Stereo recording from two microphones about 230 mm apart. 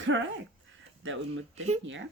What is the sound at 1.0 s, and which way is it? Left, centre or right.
Speech, right.